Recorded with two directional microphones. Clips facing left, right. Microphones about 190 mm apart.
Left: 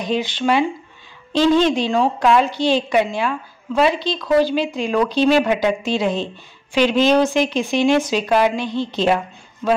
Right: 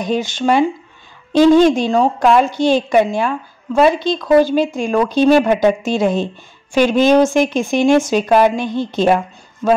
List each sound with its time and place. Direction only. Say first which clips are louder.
0.0 s a woman's voice: right 3 dB; 45° right (ahead or behind)